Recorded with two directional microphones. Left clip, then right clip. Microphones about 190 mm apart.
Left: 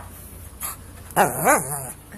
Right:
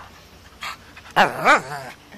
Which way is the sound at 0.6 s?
5° right (ahead or behind).